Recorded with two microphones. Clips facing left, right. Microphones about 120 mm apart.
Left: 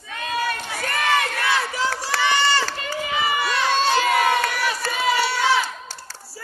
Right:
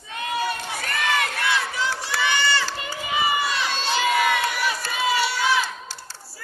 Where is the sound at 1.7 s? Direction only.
35° left (ahead or behind).